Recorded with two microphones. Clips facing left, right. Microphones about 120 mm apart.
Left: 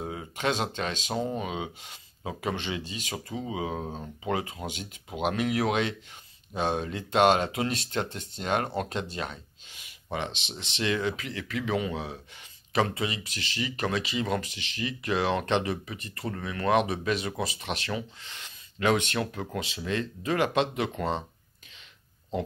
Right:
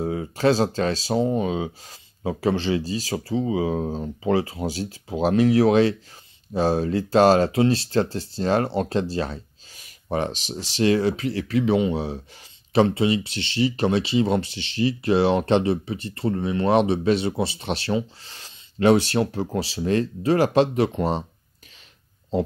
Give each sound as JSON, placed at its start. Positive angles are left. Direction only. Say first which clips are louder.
{"t": 0.0, "sound": "speech", "louder": "right 9 dB", "side_deg": -35}